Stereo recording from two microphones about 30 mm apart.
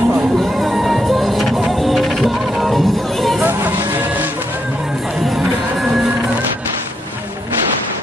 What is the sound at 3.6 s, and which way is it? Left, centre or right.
Music, right.